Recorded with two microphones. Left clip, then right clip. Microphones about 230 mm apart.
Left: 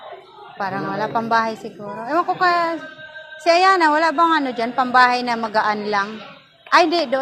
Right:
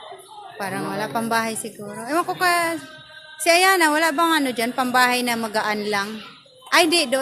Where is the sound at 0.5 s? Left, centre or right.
Right.